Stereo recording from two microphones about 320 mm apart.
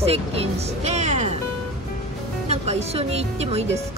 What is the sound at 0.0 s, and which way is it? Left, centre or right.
Speech, centre.